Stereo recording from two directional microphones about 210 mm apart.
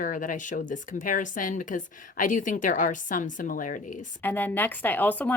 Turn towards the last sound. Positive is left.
turn(degrees=5)  # may be behind; listen again after turning